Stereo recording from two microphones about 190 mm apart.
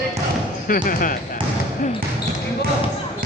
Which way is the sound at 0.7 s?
45° left (ahead or behind).